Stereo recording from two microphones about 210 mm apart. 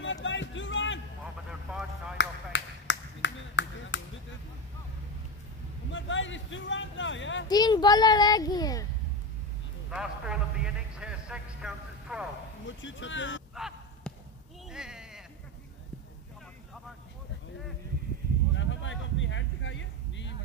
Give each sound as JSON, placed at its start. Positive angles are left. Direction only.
{"t": 0.0, "sound": "music", "side_deg": 60}
{"t": 1.5, "sound": "vehicle", "side_deg": -5}
{"t": 2.1, "sound": "a sound", "side_deg": 60}
{"t": 5.9, "sound": "speech", "side_deg": 65}
{"t": 7.4, "sound": "a child's voice", "side_deg": 20}
{"t": 9.8, "sound": "a man's voice", "side_deg": -5}
{"t": 12.6, "sound": "speech", "side_deg": 65}
{"t": 13.6, "sound": "honk", "side_deg": 0}
{"t": 14.7, "sound": "sheep", "side_deg": -5}
{"t": 18.5, "sound": "a sound", "side_deg": 60}